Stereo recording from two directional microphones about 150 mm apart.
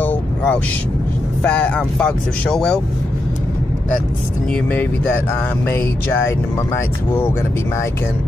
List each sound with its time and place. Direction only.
0.0 s vehicle: 10° left (ahead or behind)
1.4 s speech: 5° left (ahead or behind)
5.7 s speech: 15° left (ahead or behind)